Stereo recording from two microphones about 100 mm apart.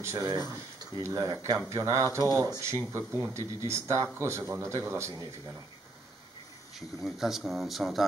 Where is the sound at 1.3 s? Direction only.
35° right (ahead or behind).